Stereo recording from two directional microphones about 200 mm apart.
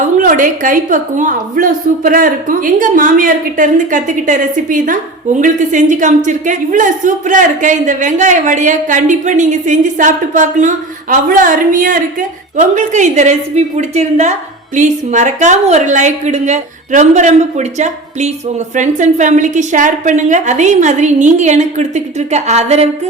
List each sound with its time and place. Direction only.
0.2 s a woman's voice: 40° right (ahead or behind)